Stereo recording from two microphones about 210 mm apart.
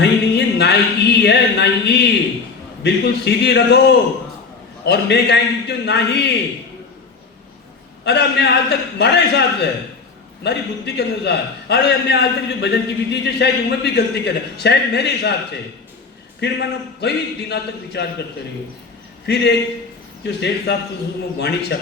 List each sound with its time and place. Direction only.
0.0 s a sound: 50° left (ahead or behind)
2.8 s a man's voice: 55° left (ahead or behind)
8.0 s a man's voice: 50° left (ahead or behind)
16.4 s a man's voice: 55° left (ahead or behind)